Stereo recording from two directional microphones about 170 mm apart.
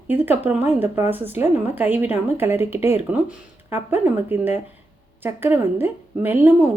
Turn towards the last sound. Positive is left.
turn(degrees=-10)  # may be behind; listen again after turning